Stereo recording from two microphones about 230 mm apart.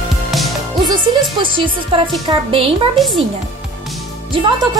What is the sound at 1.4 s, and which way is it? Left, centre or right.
A woman's voice, right.